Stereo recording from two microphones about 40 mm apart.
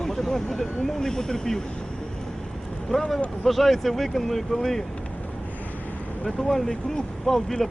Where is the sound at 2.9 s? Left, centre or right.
Centre.